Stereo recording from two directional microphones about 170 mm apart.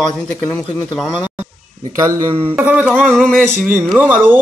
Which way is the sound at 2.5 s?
10° right (ahead or behind).